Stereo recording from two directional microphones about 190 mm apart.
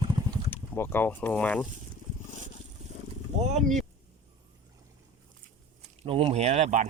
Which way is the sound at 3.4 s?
35° right (ahead or behind).